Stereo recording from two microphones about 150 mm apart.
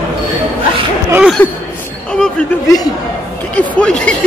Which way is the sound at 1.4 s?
15° left (ahead or behind).